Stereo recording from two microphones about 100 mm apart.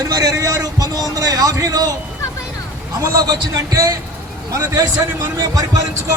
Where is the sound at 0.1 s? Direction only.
35° right (ahead or behind).